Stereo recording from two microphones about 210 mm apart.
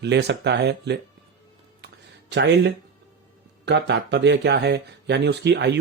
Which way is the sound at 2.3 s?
55° right (ahead or behind).